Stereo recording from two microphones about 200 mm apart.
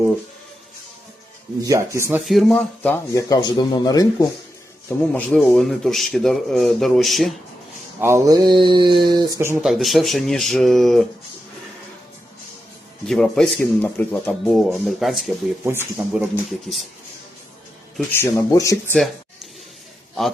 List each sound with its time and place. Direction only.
1.6 s speech: 15° right (ahead or behind)
2.2 s a man's voice: centre (ahead or behind); by 4.3 s 20° left (ahead or behind)
4.9 s speech: 5° left (ahead or behind)
8.0 s speech: 15° right (ahead or behind)
9.6 s speech: centre (ahead or behind)
13.1 s speech: centre (ahead or behind)
15.6 s speech: 10° right (ahead or behind)
16.3 s speech: centre (ahead or behind)
18.2 s a man's voice: 15° left (ahead or behind)